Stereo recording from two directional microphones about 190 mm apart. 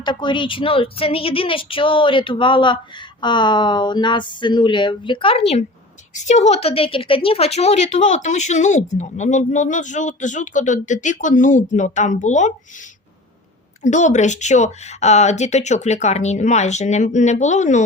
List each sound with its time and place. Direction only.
0.0 s a woman's voice: 25° left (ahead or behind); by 12.5 s 40° left (ahead or behind)
13.8 s a woman's voice: 40° left (ahead or behind)